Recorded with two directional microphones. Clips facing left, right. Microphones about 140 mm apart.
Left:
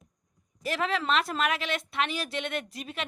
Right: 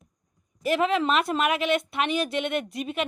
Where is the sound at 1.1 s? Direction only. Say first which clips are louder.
Right 4 dB; 5° right (ahead or behind).